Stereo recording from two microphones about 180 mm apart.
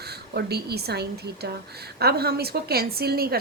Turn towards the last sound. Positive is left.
turn(degrees=-60)  # may be behind; listen again after turning